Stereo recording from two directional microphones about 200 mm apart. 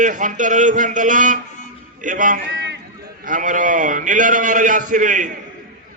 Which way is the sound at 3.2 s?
40° right (ahead or behind).